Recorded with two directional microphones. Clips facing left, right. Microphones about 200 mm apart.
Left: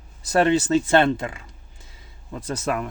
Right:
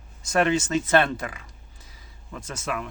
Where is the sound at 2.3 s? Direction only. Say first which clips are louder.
Left 6 dB; 35° left (ahead or behind).